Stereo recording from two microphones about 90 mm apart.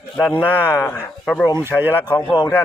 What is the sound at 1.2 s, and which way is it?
Speech, 5° left (ahead or behind).